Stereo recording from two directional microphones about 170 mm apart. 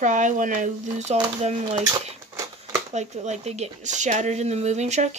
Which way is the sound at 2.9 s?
40° right (ahead or behind).